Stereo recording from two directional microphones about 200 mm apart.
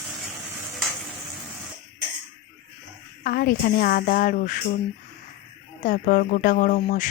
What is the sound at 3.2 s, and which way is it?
A woman's voice, 45° left (ahead or behind).